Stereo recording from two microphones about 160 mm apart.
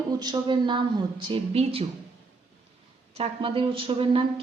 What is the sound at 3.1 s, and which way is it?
Speech, 35° right (ahead or behind).